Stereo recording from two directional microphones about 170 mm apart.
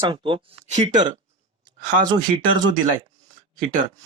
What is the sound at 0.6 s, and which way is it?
Speech, 45° right (ahead or behind).